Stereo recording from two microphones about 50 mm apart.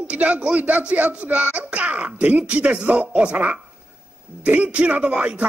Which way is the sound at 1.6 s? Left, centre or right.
Right.